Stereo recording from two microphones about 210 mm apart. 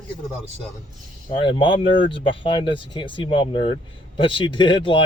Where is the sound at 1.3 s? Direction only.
25° left (ahead or behind).